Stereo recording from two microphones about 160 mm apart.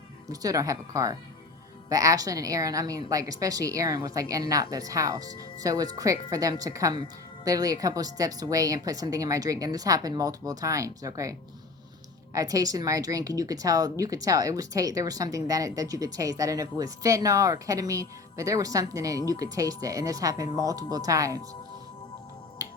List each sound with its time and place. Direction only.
0.3 s speech: 20° right (ahead or behind)